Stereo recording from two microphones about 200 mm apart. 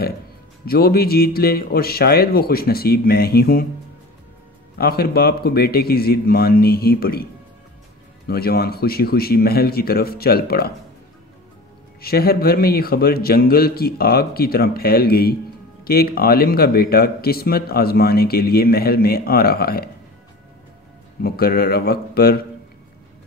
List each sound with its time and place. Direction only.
0.7 s speech: 50° left (ahead or behind)
4.7 s speech: 50° left (ahead or behind)
8.3 s speech: 50° left (ahead or behind)
12.0 s speech: 50° left (ahead or behind)
21.2 s speech: 50° left (ahead or behind)